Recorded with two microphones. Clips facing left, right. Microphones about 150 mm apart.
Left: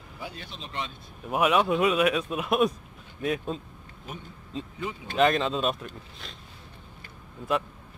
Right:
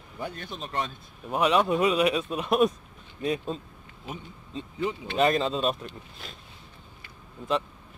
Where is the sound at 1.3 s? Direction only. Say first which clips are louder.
Even; 5° left (ahead or behind).